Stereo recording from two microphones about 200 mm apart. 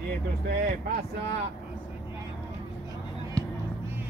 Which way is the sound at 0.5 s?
50° right (ahead or behind).